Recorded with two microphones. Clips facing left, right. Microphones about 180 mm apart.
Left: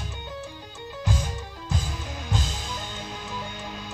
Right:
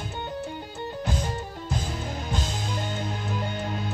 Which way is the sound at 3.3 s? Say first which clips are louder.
Right 5 dB; 55° right (ahead or behind).